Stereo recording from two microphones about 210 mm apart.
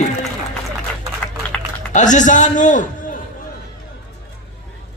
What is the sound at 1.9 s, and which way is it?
Speech, 35° left (ahead or behind).